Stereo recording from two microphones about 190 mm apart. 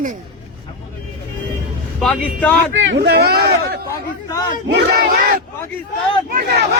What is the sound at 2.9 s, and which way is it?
Speech, 60° right (ahead or behind).